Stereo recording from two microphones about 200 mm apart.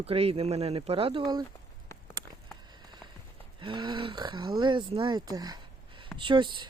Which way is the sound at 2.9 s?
20° right (ahead or behind).